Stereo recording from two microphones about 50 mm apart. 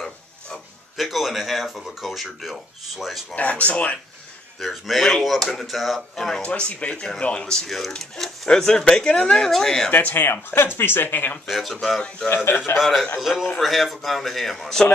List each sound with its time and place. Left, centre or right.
0.9 s speech: centre
3.3 s speech: left
4.6 s speech: centre
6.4 s speech: left
7.6 s speech: centre
9.8 s speech: left
11.4 s speech: centre
12.4 s speech: left
12.7 s speech: centre